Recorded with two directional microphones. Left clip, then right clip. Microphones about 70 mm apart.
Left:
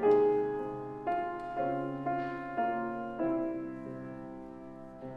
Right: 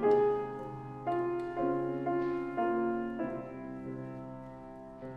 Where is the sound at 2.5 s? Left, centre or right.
Centre.